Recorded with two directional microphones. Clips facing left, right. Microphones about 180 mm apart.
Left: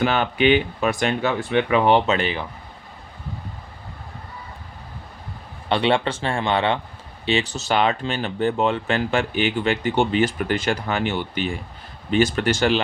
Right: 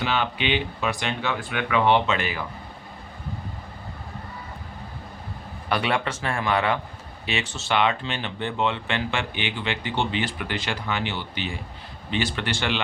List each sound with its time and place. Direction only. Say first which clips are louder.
0.0 s speech: left 7 dB; 50° left (ahead or behind)
1.5 s a man's voice: left 6 dB; 30° left (ahead or behind)
1.8 s speech: left 3 dB; 40° left (ahead or behind)
5.6 s a man's voice: left 5 dB; 25° left (ahead or behind)